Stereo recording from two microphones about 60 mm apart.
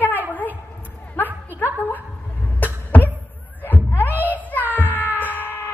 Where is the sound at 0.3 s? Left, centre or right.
Left.